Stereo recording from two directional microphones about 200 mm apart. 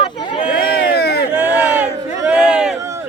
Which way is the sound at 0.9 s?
55° left (ahead or behind).